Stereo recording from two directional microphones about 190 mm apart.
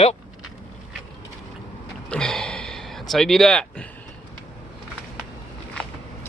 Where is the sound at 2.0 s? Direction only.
5° left (ahead or behind).